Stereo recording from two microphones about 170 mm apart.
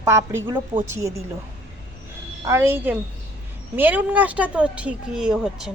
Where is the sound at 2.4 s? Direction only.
15° right (ahead or behind).